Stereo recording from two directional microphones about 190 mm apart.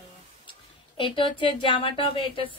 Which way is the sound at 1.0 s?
25° left (ahead or behind).